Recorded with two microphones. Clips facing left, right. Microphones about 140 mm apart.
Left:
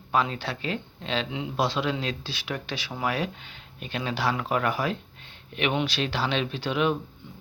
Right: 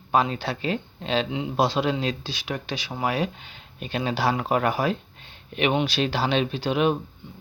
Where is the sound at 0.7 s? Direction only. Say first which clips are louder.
Right 4 dB; 40° right (ahead or behind).